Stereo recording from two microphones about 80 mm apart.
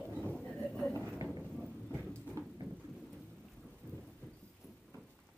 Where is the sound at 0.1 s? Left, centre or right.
Centre.